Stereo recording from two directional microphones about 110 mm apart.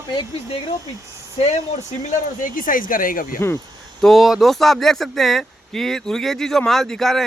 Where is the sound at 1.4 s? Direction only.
85° left.